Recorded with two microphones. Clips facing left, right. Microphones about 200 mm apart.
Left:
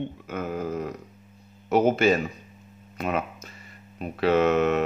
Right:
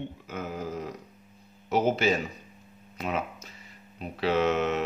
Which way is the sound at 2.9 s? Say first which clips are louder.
Left 3 dB; 55° left (ahead or behind).